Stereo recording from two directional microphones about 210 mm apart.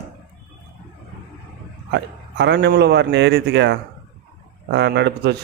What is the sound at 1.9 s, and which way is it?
A man's voice, 55° right (ahead or behind).